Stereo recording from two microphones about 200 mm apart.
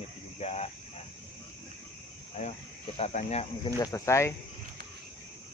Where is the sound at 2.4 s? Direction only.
30° left (ahead or behind).